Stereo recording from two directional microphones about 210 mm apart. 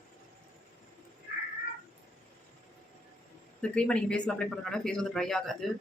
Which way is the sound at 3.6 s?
5° left (ahead or behind).